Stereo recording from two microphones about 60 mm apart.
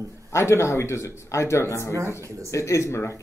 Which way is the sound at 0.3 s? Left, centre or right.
Left.